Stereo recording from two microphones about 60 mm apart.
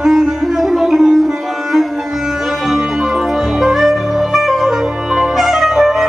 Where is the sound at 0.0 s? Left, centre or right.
Centre.